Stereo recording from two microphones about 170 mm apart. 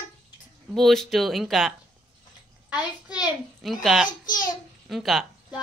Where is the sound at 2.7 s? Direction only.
5° right (ahead or behind).